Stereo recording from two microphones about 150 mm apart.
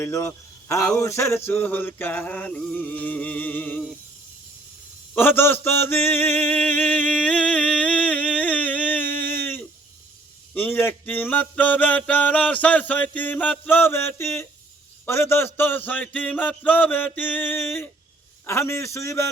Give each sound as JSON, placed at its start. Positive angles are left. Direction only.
{"t": 0.0, "sound": "a man's voice", "side_deg": 20}
{"t": 0.9, "sound": "mantra", "side_deg": 20}
{"t": 5.1, "sound": "mantra", "side_deg": 15}
{"t": 18.9, "sound": "a sound", "side_deg": 20}